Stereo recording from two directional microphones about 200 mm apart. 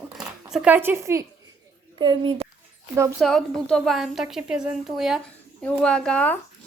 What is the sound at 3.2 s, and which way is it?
A woman's voice, 5° left (ahead or behind).